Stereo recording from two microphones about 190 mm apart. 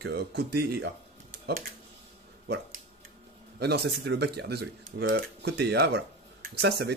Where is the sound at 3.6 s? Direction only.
60° right (ahead or behind).